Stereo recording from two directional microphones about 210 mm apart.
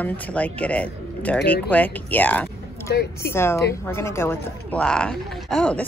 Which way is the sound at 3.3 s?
10° left (ahead or behind).